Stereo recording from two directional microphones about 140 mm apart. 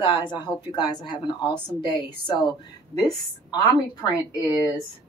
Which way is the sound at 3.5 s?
25° left (ahead or behind).